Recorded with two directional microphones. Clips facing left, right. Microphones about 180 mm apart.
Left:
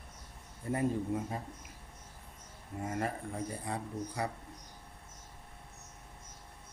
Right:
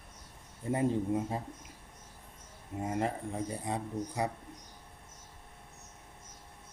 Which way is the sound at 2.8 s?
20° right (ahead or behind).